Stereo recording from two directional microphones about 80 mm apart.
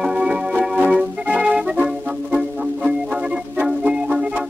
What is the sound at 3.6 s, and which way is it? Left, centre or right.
Music, centre.